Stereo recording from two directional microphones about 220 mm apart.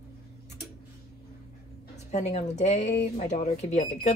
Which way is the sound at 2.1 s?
30° left (ahead or behind).